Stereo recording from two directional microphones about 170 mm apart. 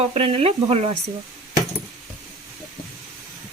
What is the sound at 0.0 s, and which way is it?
Speech, 35° right (ahead or behind).